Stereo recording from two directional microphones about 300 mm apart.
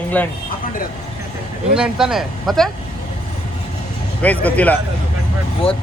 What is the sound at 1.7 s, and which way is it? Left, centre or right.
Speech, centre.